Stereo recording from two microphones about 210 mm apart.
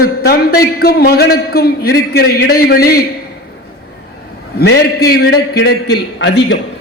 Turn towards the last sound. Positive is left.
turn(degrees=55)  # may be behind; listen again after turning